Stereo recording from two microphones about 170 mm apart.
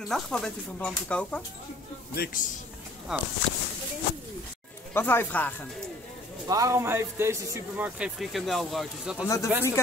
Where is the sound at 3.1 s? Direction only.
5° right (ahead or behind).